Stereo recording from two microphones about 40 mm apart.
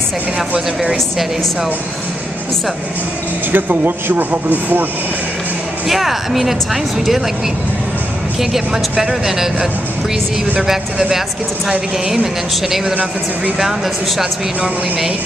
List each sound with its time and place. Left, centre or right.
3.5 s speech: right
5.9 s speech: centre
8.4 s speech: centre
12.1 s speech: centre